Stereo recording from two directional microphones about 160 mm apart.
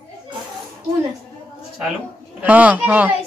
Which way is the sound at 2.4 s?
10° right (ahead or behind).